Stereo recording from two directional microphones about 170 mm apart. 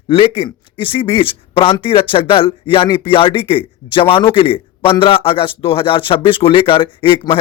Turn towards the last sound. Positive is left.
turn(degrees=30)  # may be behind; listen again after turning